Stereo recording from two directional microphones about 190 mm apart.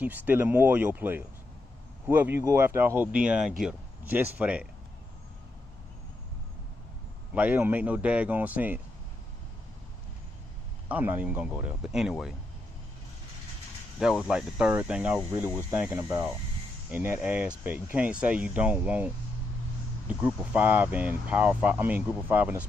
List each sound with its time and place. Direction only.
0.0 s speech: 10° right (ahead or behind)
7.3 s speech: 10° right (ahead or behind)
10.8 s speech: 10° right (ahead or behind)
14.0 s speech: centre (ahead or behind)
15.1 s speech: 20° right (ahead or behind)